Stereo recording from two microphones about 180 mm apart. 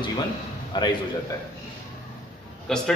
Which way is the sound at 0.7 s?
25° left (ahead or behind).